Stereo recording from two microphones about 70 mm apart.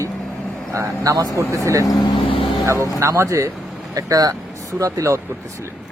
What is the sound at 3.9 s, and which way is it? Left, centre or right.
Speech, right.